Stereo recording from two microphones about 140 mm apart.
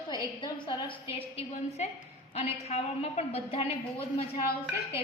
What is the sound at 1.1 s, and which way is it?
A woman's voice, 45° left (ahead or behind).